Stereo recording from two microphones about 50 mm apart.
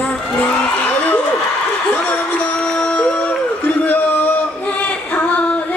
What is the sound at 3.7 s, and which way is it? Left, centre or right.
Singing, left.